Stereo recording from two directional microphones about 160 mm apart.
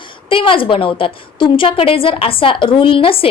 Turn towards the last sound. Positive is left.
turn(degrees=35)  # may be behind; listen again after turning